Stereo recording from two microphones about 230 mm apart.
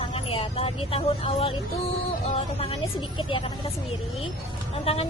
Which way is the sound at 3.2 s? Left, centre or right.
Left.